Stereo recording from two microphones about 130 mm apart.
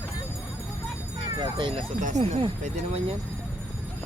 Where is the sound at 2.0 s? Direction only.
65° right (ahead or behind).